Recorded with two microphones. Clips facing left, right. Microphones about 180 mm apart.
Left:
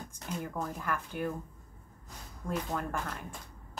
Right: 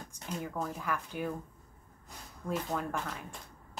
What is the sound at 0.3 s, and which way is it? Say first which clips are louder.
A woman's voice: even; centre (ahead or behind).